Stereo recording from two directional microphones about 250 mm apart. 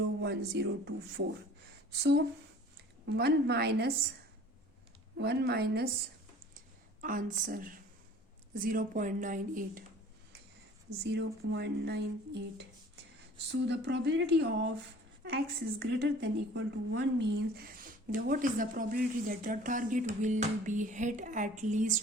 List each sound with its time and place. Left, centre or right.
0.2 s a woman's voice: right
5.1 s a woman's voice: right
7.0 s a woman's voice: right
11.0 s speech: right
15.8 s a woman's voice: right